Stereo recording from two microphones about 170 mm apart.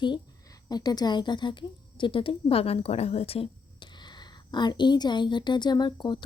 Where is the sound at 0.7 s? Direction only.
25° left (ahead or behind).